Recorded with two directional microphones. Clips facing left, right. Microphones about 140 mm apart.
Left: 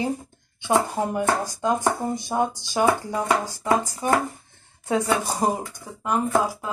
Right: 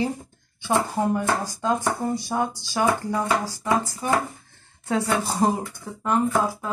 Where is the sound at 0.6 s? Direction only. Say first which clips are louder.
Left 1 dB; 15° left (ahead or behind).